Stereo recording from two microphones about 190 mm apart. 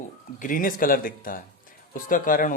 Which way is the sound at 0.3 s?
45° left (ahead or behind).